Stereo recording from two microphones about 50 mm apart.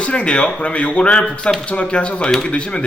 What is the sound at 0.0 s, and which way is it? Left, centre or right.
Speech, left.